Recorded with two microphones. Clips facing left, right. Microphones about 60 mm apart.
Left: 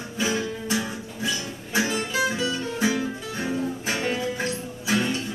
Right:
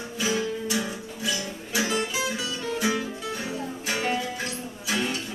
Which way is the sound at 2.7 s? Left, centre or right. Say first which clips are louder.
Left 1 dB; left.